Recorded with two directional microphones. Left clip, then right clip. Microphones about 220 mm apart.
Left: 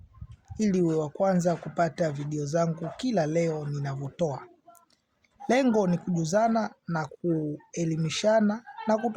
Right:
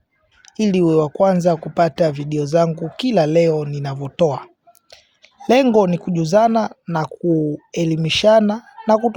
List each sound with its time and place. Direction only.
0.4 s speech: 35° right (ahead or behind)